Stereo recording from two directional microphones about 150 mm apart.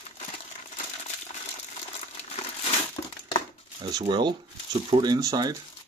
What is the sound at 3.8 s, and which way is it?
Speech, 30° right (ahead or behind).